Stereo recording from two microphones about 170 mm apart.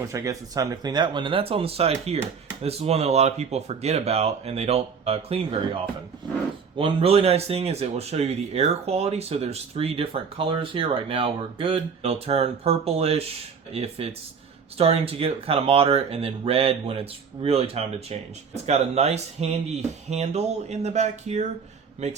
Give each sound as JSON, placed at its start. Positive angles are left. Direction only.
{"t": 0.1, "sound": "speech", "side_deg": -20}